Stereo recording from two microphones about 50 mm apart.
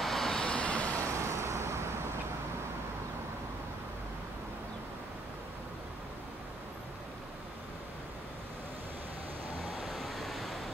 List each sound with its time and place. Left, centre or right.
0.0 s vehicle: centre
0.4 s vehicle: left
1.1 s vehicle: right
9.8 s a sound: centre